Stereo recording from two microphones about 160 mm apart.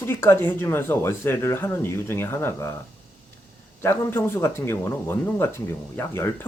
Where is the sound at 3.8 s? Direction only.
15° left (ahead or behind).